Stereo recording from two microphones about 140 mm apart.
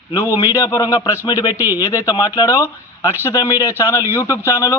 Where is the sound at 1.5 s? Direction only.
15° right (ahead or behind).